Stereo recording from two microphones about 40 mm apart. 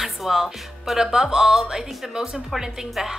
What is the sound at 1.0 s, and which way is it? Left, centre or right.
A woman's voice, centre.